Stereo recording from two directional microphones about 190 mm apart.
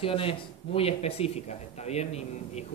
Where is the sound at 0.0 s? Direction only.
30° left (ahead or behind).